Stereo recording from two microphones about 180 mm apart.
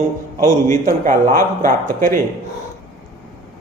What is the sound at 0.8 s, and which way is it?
A man's voice, 50° right (ahead or behind).